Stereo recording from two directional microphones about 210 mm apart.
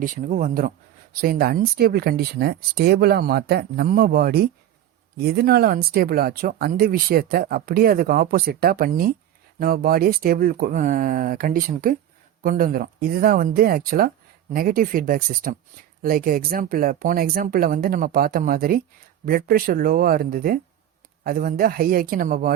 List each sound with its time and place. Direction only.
0.0 s speech: 40° right (ahead or behind)